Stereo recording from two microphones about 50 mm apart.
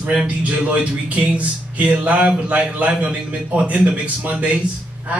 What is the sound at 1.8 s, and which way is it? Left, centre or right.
Speech, right.